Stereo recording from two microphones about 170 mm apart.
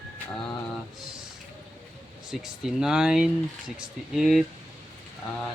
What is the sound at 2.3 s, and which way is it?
Speech, 5° right (ahead or behind).